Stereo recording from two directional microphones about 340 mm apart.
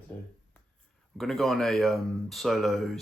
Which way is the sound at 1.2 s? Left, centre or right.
Centre.